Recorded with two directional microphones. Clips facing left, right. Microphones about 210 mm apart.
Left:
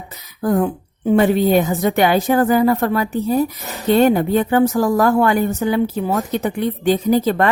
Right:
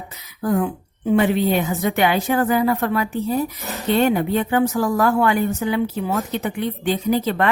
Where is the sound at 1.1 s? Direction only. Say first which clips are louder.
Left 4 dB; 40° left (ahead or behind).